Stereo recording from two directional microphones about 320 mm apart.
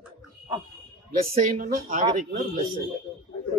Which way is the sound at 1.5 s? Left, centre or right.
Right.